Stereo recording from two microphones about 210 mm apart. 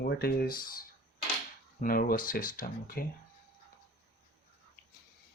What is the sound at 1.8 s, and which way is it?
Speech, 45° left (ahead or behind).